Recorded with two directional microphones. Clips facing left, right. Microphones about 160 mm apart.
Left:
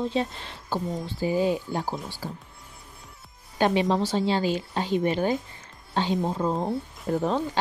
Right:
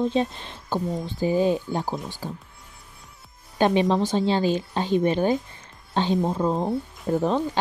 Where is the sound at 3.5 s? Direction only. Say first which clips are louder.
Right 2 dB; 20° right (ahead or behind).